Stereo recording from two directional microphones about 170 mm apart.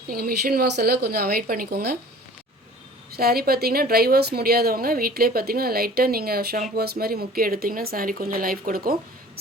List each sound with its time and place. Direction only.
0.1 s a woman's voice: 60° right (ahead or behind)
3.2 s a woman's voice: 65° right (ahead or behind)